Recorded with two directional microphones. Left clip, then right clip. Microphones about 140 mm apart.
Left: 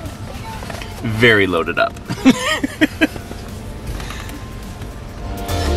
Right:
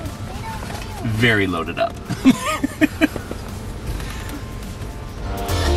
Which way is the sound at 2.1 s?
10° left (ahead or behind).